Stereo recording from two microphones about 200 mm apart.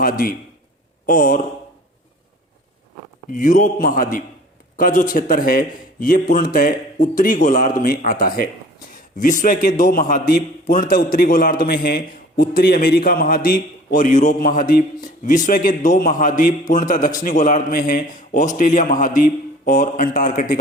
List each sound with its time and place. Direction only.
0.0 s a man's voice: 45° left (ahead or behind)
3.3 s a man's voice: 40° left (ahead or behind)